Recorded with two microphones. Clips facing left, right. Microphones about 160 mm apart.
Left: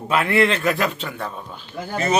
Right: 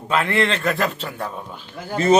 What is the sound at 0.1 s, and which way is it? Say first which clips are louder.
A man's voice: left 2 dB; 10° left (ahead or behind).